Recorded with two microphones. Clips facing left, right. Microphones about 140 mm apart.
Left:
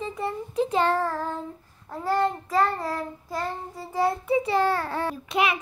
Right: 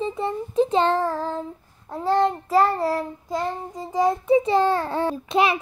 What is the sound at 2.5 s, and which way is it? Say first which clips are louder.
Child singing: right 5 dB; 30° right (ahead or behind).